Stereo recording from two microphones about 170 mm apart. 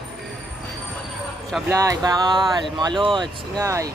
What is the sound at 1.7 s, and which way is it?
Speech, 20° right (ahead or behind).